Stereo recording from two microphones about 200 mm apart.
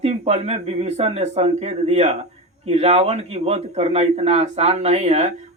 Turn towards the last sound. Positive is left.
turn(degrees=-35)  # may be behind; listen again after turning